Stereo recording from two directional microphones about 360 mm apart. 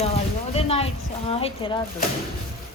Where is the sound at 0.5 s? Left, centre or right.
Centre.